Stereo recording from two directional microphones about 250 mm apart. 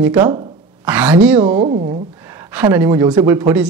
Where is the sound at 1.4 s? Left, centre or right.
Right.